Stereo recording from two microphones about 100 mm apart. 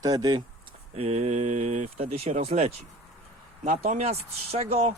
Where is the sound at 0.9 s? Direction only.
90° right.